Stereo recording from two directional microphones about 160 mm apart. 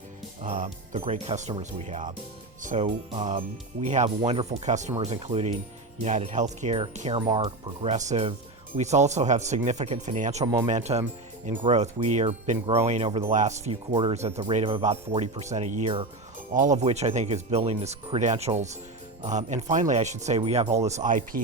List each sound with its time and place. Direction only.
0.4 s speech: 50° right (ahead or behind)
2.8 s speech: 35° right (ahead or behind)
3.3 s speech: 45° right (ahead or behind)
13.3 s speech: 45° right (ahead or behind)
13.9 s speech: 30° right (ahead or behind); by 21.4 s 55° right (ahead or behind)